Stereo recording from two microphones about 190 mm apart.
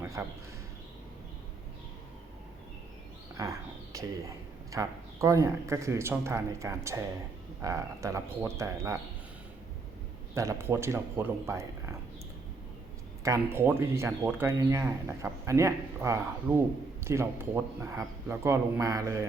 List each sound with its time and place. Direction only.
0.0 s a sound: 15° right (ahead or behind)
3.4 s speech: 20° right (ahead or behind)
4.7 s speech: 15° right (ahead or behind)
10.3 s speech: 15° right (ahead or behind)
13.2 s speech: 15° right (ahead or behind)